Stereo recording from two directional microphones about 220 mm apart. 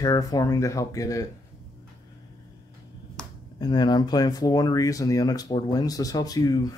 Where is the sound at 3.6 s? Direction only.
20° left (ahead or behind).